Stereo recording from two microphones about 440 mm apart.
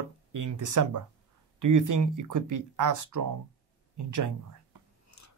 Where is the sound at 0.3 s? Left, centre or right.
Right.